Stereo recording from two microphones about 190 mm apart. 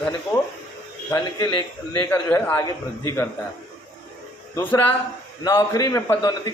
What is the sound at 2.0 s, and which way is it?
A man's voice, 10° left (ahead or behind).